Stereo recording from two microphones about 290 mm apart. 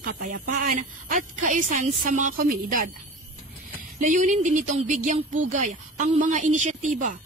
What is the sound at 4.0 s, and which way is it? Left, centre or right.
Speech, right.